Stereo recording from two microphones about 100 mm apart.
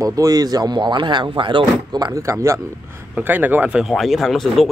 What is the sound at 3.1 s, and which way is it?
Speech, 15° right (ahead or behind).